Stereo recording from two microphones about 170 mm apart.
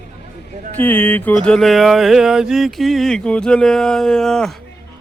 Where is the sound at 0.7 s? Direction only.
10° left (ahead or behind).